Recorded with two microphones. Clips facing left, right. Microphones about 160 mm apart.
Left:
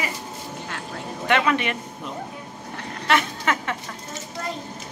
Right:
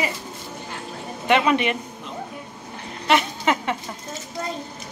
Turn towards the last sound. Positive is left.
turn(degrees=-20)  # may be behind; listen again after turning